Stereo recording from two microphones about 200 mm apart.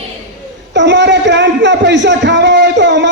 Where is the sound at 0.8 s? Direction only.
60° right (ahead or behind).